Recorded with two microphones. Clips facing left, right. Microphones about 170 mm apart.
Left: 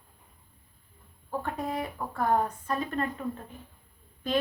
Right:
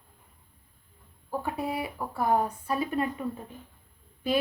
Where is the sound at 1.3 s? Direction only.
10° right (ahead or behind).